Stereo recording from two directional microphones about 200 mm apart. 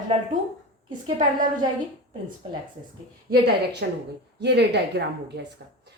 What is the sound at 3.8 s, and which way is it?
A woman's voice, 55° right (ahead or behind).